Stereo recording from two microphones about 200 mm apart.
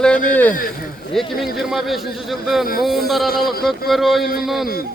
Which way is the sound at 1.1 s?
Centre (ahead or behind).